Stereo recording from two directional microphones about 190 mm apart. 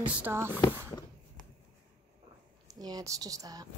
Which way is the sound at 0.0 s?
10° right (ahead or behind).